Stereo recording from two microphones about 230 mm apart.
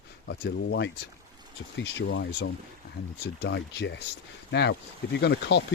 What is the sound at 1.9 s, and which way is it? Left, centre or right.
Speech, left.